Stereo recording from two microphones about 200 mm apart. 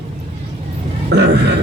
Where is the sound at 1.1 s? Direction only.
55° right (ahead or behind).